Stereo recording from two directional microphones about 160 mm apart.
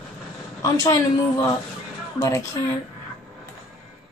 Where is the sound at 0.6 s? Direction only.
20° left (ahead or behind).